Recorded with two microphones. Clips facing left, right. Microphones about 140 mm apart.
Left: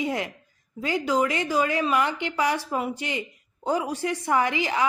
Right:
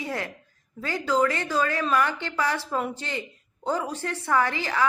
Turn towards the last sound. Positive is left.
turn(degrees=15)  # may be behind; listen again after turning